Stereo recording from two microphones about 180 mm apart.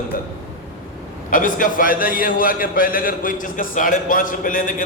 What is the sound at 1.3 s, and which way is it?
A man's voice, 50° left (ahead or behind).